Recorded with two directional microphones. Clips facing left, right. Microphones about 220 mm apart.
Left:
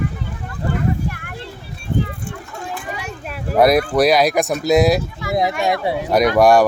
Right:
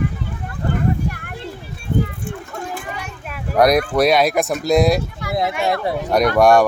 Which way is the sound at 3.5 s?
5° left (ahead or behind).